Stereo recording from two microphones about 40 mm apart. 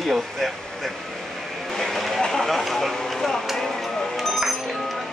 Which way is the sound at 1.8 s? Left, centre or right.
Centre.